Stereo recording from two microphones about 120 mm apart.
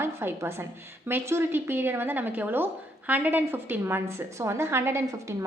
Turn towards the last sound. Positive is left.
turn(degrees=-20)  # may be behind; listen again after turning